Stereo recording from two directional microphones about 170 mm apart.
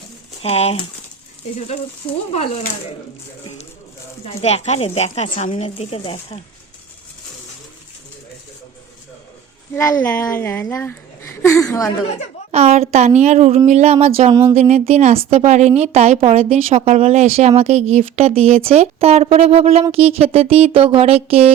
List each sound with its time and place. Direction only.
0.4 s speech: 35° left (ahead or behind)
2.3 s speech: 35° left (ahead or behind)
4.2 s speech: 40° left (ahead or behind)
9.7 s speech: 15° left (ahead or behind)
12.5 s speech: 40° right (ahead or behind)